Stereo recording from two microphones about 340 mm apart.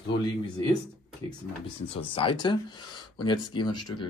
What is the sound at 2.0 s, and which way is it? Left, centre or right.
Speech, centre.